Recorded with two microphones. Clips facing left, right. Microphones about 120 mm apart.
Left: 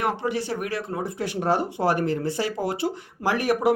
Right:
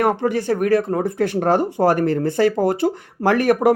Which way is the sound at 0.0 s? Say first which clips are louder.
Right 7 dB; 50° right (ahead or behind).